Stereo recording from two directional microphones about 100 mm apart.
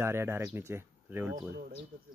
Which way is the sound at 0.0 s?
25° right (ahead or behind).